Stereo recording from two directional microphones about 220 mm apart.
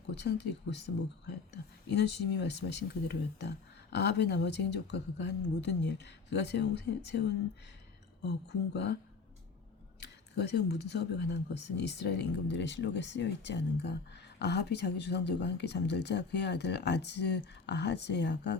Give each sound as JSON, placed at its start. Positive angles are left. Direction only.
{"t": 0.1, "sound": "speech", "side_deg": 50}
{"t": 1.9, "sound": "speech", "side_deg": 50}
{"t": 10.3, "sound": "speech", "side_deg": 50}